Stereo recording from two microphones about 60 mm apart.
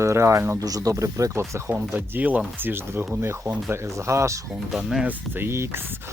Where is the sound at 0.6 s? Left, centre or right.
Right.